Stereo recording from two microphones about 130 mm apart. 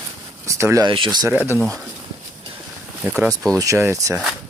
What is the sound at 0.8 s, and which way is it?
Speech, 35° right (ahead or behind).